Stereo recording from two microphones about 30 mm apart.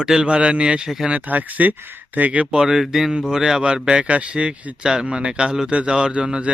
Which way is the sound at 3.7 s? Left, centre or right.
Right.